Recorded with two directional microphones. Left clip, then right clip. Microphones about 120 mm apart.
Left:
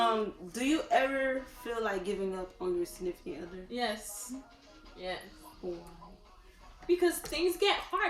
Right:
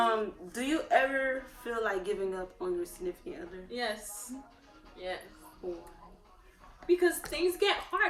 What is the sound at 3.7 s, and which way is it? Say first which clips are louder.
Speech: left 1 dB; 10° left (ahead or behind).